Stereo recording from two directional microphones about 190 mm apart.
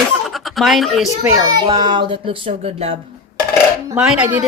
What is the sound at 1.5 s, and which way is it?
Speech, 20° right (ahead or behind).